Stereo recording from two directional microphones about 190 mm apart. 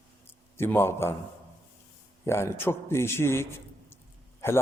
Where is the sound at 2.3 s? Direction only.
15° left (ahead or behind).